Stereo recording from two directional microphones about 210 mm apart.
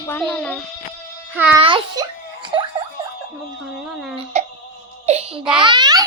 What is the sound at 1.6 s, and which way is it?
Speech, 20° right (ahead or behind).